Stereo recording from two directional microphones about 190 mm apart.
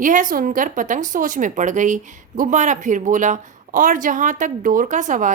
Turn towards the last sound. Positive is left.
turn(degrees=-40)  # may be behind; listen again after turning